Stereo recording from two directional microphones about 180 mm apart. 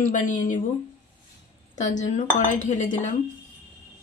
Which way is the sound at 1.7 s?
45° left (ahead or behind).